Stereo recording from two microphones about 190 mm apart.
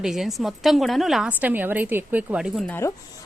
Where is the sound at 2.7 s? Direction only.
15° left (ahead or behind).